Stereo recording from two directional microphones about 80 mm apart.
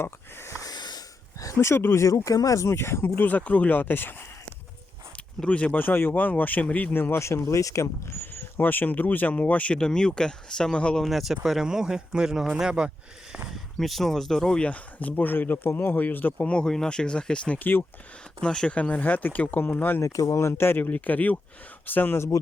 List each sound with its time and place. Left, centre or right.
0.0 s wheeze: left
0.6 s a sound: left
2.6 s speech: left
5.1 s speech: centre
11.0 s speech: centre
13.5 s speech: centre; by 17.8 s left
18.3 s speech: centre
20.0 s speech: left